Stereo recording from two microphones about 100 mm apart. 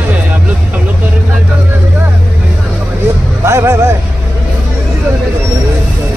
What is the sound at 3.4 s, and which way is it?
Music, 30° right (ahead or behind).